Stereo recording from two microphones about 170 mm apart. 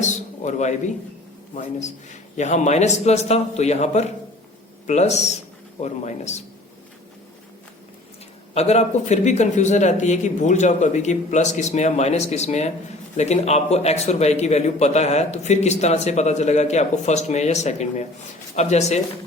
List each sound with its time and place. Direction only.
0.0 s a sound: 45° left (ahead or behind)
1.5 s a man's voice: 45° left (ahead or behind)
8.5 s a man's voice: 40° left (ahead or behind)